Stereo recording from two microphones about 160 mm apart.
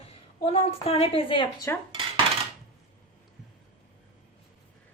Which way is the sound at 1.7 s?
15° left (ahead or behind).